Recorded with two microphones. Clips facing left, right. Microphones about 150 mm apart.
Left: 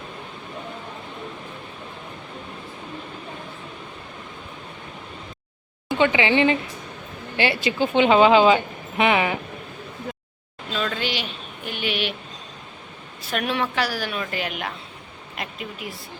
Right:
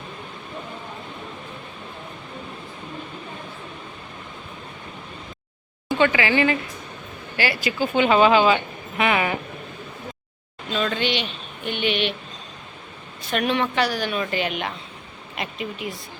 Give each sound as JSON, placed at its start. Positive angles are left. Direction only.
{"t": 6.0, "sound": "speech", "side_deg": 20}
{"t": 10.7, "sound": "speech", "side_deg": 0}
{"t": 13.2, "sound": "speech", "side_deg": 5}